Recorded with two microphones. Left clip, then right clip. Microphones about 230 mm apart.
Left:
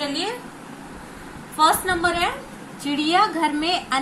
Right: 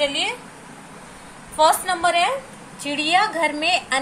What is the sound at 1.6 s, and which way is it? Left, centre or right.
A woman's voice, right.